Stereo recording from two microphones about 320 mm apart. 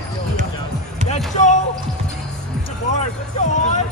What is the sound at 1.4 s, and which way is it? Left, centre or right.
Basketball bounce, left.